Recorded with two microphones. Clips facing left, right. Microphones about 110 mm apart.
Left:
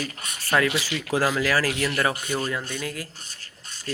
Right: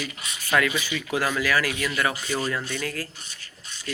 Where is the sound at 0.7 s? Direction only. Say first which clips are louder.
Left 1 dB; 90° left.